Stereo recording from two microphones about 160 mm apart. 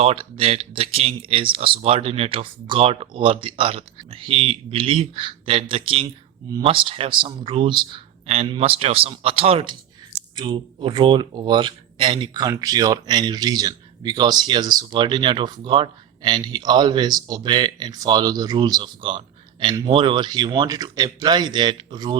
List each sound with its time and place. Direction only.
0.0 s speech: 35° right (ahead or behind)